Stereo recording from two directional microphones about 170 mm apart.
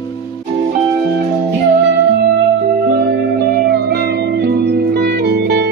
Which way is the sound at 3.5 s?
65° right (ahead or behind).